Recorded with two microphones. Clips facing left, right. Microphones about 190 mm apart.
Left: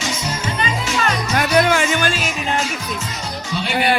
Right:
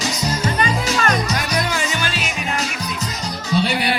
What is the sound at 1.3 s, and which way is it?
Music, 70° left (ahead or behind).